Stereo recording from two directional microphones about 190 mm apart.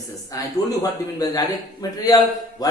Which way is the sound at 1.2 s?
20° left (ahead or behind).